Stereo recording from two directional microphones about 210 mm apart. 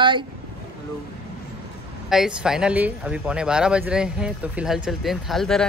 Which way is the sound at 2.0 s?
5° right (ahead or behind).